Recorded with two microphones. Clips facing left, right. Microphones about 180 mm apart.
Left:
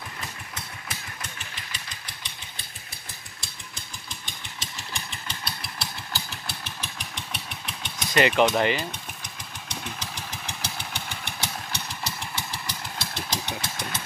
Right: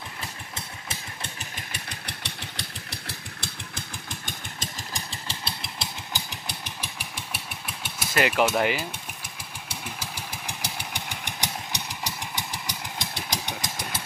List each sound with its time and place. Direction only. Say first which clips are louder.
0.6 s vehicle: right 1 dB; 30° right (ahead or behind)
1.5 s vehicle: right 3 dB; 60° right (ahead or behind)
3.7 s vehicle: right 4 dB; 50° right (ahead or behind)
4.9 s engine: right 1 dB; 30° right (ahead or behind); by 8.8 s 5° right (ahead or behind)
9.7 s vehicle: left 1 dB; 10° right (ahead or behind)